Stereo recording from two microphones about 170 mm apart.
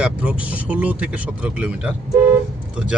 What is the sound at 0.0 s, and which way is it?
Speech, 10° right (ahead or behind).